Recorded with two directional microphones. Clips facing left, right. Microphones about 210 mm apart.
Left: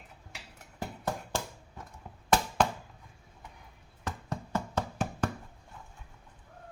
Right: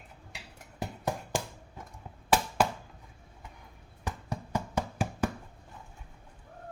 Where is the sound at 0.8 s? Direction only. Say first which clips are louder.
Right 1 dB; 15° right (ahead or behind).